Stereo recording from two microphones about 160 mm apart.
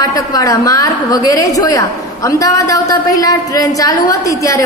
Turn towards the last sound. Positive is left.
turn(degrees=20)  # may be behind; listen again after turning